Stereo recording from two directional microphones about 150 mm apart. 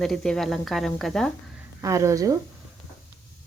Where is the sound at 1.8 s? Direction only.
20° right (ahead or behind).